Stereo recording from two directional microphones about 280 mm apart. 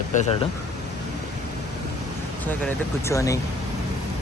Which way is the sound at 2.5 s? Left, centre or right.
Centre.